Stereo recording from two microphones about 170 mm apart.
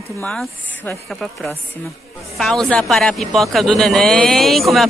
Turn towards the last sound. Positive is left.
turn(degrees=0)  # may be behind; listen again after turning